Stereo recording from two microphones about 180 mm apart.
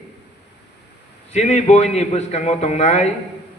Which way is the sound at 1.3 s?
40° left (ahead or behind).